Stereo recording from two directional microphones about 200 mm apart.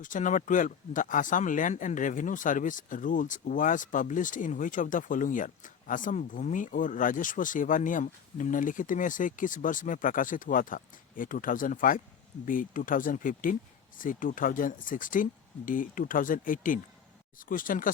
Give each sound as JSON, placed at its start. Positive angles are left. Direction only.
{"t": 0.0, "sound": "speech", "side_deg": 40}